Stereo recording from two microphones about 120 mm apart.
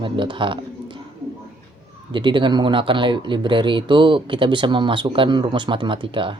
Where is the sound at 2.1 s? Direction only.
45° right (ahead or behind).